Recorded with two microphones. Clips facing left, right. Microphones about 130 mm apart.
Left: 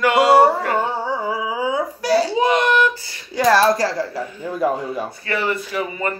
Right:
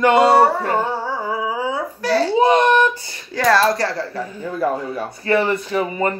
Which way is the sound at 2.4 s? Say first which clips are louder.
Right 3 dB; 30° right (ahead or behind).